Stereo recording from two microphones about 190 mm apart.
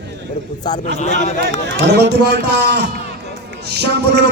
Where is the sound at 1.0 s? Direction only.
40° left (ahead or behind).